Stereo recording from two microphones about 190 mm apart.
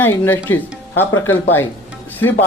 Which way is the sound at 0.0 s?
10° left (ahead or behind).